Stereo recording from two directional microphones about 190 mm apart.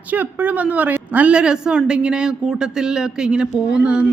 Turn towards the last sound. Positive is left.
turn(degrees=-5)  # may be behind; listen again after turning